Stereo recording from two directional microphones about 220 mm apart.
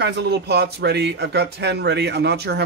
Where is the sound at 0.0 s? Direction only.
50° right (ahead or behind).